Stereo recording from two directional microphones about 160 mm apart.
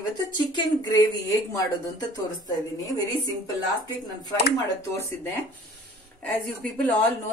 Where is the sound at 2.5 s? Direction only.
25° left (ahead or behind).